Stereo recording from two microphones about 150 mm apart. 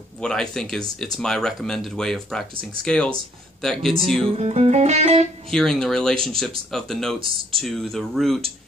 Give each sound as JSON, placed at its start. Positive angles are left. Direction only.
{"t": 0.2, "sound": "speech", "side_deg": 5}
{"t": 4.4, "sound": "music", "side_deg": -45}
{"t": 5.5, "sound": "speech", "side_deg": 5}